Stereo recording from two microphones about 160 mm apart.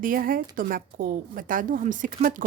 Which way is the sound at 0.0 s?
60° right (ahead or behind).